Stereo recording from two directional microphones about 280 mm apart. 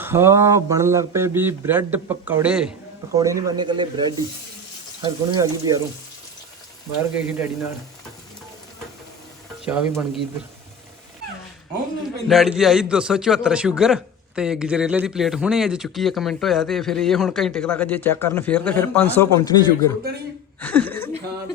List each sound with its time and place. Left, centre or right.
0.0 s speech: centre
7.0 s speech: centre
9.6 s a man's voice: centre
12.3 s a man's voice: centre